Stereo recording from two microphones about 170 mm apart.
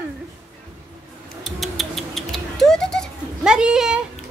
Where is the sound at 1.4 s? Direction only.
Centre (ahead or behind).